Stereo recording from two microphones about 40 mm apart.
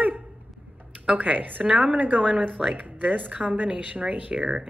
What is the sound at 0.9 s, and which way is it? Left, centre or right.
A woman's voice, right.